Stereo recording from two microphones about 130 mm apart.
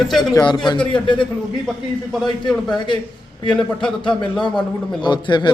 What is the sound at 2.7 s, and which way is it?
Speech, 35° left (ahead or behind).